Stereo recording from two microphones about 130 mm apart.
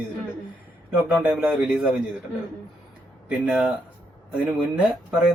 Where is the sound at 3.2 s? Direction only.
10° right (ahead or behind).